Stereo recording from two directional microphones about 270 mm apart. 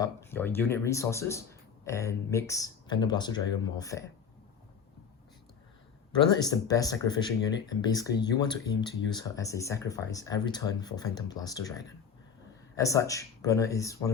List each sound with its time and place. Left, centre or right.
0.0 s speech: centre
6.4 s speech: centre